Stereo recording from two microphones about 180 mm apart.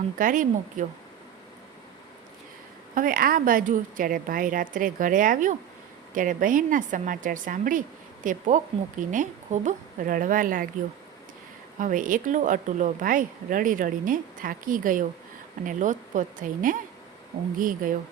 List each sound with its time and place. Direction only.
0.2 s a woman's voice: 45° right (ahead or behind)
2.9 s a woman's voice: 50° right (ahead or behind)
11.8 s a woman's voice: 50° right (ahead or behind)